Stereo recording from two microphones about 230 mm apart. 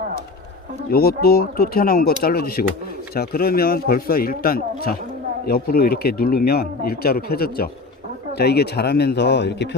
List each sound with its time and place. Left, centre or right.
0.9 s speech: left